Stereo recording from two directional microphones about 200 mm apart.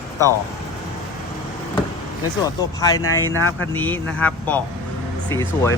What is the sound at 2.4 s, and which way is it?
Speech, 15° left (ahead or behind).